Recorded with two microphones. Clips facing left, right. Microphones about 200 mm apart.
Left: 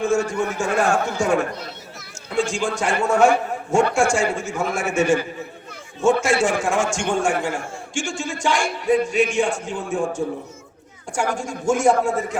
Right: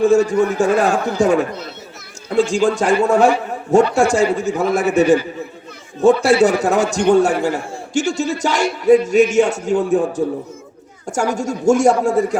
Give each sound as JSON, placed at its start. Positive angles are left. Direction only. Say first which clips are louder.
{"t": 0.0, "sound": "a man's voice", "louder": "right 8 dB", "side_deg": -35}
{"t": 6.2, "sound": "a man's voice", "louder": "right 7 dB", "side_deg": -40}